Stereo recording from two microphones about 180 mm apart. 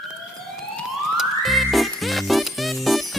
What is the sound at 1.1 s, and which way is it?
Music, centre (ahead or behind).